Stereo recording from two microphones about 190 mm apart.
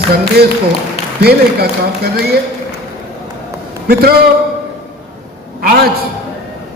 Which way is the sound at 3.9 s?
55° right (ahead or behind).